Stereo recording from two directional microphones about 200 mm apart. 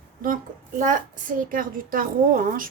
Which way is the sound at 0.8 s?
40° right (ahead or behind).